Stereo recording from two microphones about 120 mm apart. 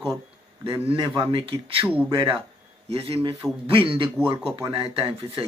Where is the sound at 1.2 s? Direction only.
45° right (ahead or behind).